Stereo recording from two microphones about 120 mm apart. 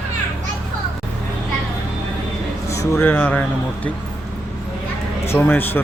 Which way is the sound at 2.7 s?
25° left (ahead or behind).